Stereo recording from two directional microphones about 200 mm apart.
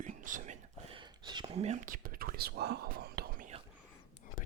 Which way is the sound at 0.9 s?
20° right (ahead or behind).